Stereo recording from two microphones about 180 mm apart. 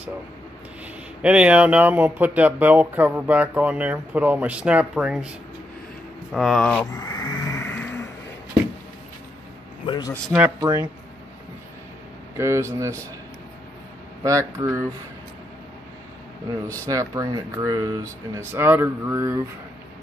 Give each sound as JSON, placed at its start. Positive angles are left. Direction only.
{"t": 1.2, "sound": "speech", "side_deg": -5}
{"t": 6.3, "sound": "speech", "side_deg": 0}
{"t": 7.0, "sound": "vehicle", "side_deg": 20}
{"t": 9.8, "sound": "a man's voice", "side_deg": 20}
{"t": 10.3, "sound": "speech", "side_deg": -15}
{"t": 12.4, "sound": "speech", "side_deg": -15}
{"t": 14.2, "sound": "speech", "side_deg": -15}
{"t": 16.8, "sound": "speech", "side_deg": -15}